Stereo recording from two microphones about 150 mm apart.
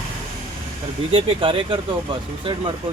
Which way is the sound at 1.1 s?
35° right (ahead or behind).